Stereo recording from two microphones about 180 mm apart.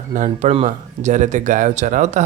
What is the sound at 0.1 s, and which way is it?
Speech, 40° right (ahead or behind).